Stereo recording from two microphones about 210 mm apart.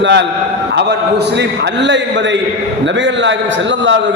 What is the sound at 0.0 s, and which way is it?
Speech, 55° right (ahead or behind).